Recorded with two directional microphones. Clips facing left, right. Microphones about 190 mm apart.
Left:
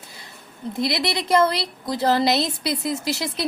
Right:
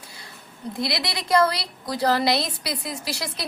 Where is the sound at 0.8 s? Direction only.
25° left (ahead or behind).